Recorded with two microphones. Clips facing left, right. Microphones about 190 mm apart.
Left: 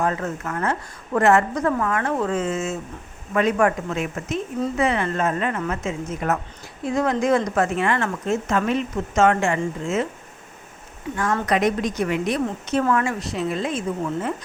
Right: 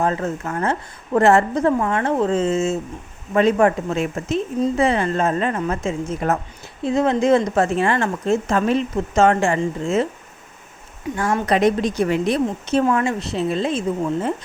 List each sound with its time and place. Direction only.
0.0 s a woman's voice: 30° right (ahead or behind)
11.4 s a woman's voice: 30° right (ahead or behind)